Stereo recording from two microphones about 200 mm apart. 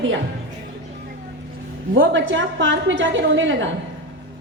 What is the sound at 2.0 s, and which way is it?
A woman's voice, 70° right (ahead or behind).